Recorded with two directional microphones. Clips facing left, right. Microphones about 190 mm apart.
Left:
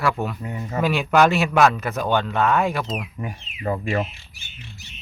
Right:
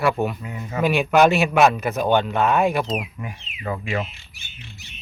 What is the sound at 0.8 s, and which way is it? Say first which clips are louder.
A man's voice: right 2 dB; 20° right (ahead or behind).